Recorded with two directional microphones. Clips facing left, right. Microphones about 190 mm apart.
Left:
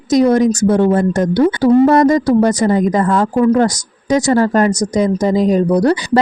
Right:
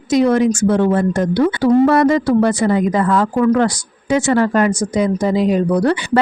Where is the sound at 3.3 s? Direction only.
25° left (ahead or behind).